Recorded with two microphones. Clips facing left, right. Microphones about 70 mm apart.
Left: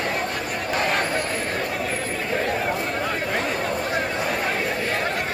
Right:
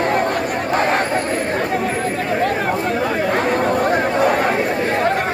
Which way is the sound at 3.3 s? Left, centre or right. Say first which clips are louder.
Right 8 dB; right.